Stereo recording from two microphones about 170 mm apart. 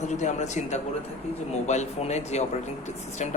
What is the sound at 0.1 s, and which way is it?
Speech, 45° left (ahead or behind).